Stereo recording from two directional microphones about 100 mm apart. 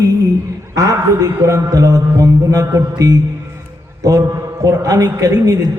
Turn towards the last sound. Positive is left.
turn(degrees=-35)  # may be behind; listen again after turning